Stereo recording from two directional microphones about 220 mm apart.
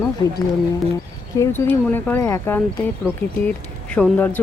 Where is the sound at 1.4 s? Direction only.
10° left (ahead or behind).